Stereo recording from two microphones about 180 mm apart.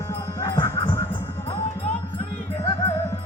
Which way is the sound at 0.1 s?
15° left (ahead or behind).